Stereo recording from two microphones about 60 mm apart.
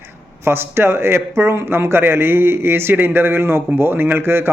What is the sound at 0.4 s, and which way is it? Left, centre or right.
Speech, right.